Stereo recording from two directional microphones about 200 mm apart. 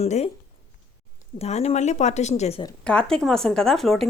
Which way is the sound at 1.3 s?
30° left (ahead or behind).